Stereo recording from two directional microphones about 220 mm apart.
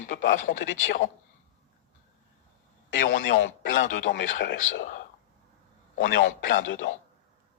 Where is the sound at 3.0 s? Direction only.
35° left (ahead or behind).